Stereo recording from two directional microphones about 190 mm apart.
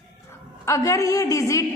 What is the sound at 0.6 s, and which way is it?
A woman's voice, 15° left (ahead or behind).